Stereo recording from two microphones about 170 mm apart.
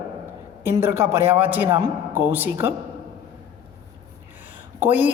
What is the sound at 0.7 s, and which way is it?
A woman's voice, 15° right (ahead or behind).